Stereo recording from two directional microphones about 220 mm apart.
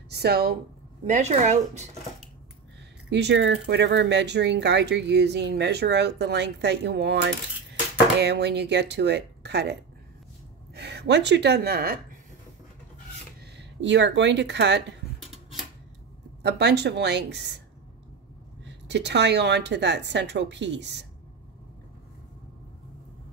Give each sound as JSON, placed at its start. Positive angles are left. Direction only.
{"t": 0.1, "sound": "speech", "side_deg": -45}
{"t": 1.0, "sound": "speech", "side_deg": -35}
{"t": 3.1, "sound": "speech", "side_deg": -50}
{"t": 13.6, "sound": "speech", "side_deg": -55}
{"t": 16.4, "sound": "speech", "side_deg": -50}
{"t": 18.6, "sound": "speech", "side_deg": -50}